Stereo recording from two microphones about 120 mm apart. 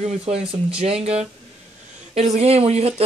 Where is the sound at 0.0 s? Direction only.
60° right (ahead or behind).